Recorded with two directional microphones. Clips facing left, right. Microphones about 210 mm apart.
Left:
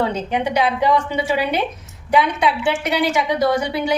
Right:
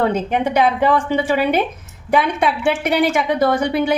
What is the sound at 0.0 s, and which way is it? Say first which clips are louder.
A woman's voice: right 3 dB; 50° right (ahead or behind).